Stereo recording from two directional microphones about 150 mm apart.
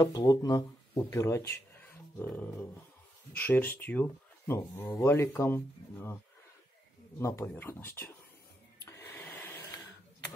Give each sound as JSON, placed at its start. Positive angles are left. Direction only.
{"t": 0.0, "sound": "speech", "side_deg": 25}
{"t": 7.2, "sound": "speech", "side_deg": 20}
{"t": 8.8, "sound": "a sound", "side_deg": 15}